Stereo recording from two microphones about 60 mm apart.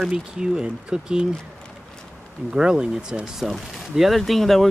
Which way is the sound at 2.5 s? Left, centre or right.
Centre.